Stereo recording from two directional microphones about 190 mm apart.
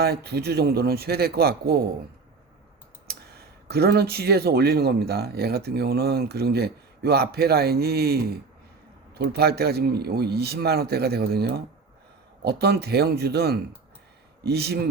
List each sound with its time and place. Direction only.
0.0 s speech: 60° right (ahead or behind)
3.1 s speech: 55° right (ahead or behind)